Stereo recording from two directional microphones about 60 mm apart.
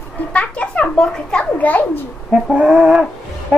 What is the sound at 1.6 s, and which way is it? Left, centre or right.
Speech, left.